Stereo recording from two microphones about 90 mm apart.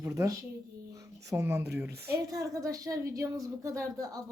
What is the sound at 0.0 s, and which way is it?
Speech, 35° right (ahead or behind).